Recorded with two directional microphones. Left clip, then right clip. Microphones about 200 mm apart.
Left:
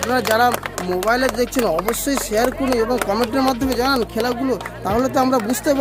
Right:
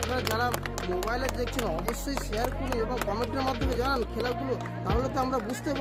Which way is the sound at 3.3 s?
20° left (ahead or behind).